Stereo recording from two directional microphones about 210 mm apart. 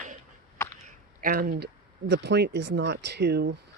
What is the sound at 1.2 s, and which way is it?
Speech, 40° right (ahead or behind).